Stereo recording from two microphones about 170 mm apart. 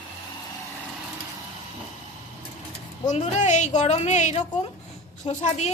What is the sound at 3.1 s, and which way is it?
A woman's voice, 45° left (ahead or behind).